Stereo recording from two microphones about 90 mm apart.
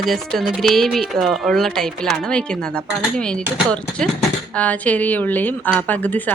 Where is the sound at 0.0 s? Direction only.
Centre (ahead or behind).